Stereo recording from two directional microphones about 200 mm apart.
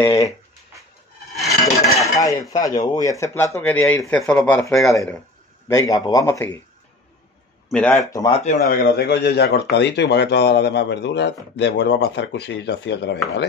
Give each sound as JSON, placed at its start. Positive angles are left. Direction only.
{"t": 0.0, "sound": "speech", "side_deg": 15}
{"t": 2.1, "sound": "cutlery", "side_deg": 15}
{"t": 2.5, "sound": "speech", "side_deg": 20}
{"t": 5.7, "sound": "speech", "side_deg": 15}
{"t": 7.7, "sound": "speech", "side_deg": 5}
{"t": 8.1, "sound": "speech", "side_deg": 20}
{"t": 8.4, "sound": "a man's voice", "side_deg": 40}